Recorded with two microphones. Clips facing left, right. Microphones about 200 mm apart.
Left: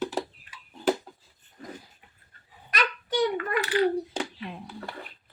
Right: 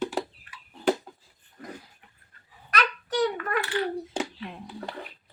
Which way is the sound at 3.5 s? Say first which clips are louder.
Left 2 dB; 20° left (ahead or behind).